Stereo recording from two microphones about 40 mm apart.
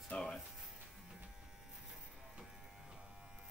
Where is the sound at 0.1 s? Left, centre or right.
Left.